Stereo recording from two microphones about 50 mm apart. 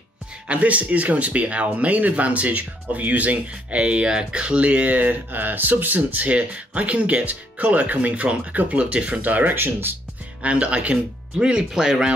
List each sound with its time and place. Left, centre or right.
0.5 s speech: right
10.4 s speech: right